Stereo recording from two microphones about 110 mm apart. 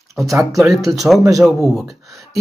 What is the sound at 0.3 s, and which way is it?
Speech, 30° right (ahead or behind).